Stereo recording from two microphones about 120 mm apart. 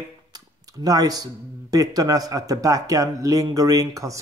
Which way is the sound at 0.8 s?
30° right (ahead or behind).